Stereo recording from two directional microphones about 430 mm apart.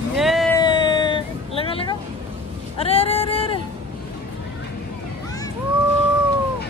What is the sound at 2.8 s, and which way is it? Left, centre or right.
Speech, centre.